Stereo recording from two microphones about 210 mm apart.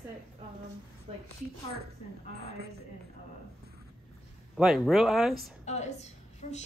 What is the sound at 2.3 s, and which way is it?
Speech, 50° right (ahead or behind).